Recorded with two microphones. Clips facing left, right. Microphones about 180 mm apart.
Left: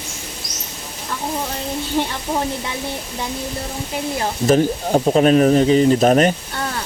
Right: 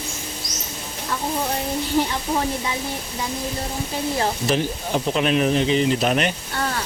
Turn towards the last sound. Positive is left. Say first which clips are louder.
# left 7 dB
turn(degrees=40)  # may be behind; listen again after turning